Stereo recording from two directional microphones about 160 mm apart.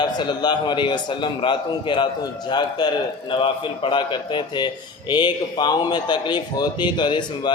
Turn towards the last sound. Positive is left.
turn(degrees=25)  # may be behind; listen again after turning